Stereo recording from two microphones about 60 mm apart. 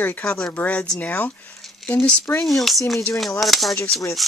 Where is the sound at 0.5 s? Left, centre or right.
Left.